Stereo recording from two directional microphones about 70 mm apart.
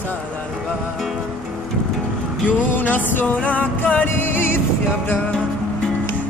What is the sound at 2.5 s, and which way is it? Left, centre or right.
Music, left.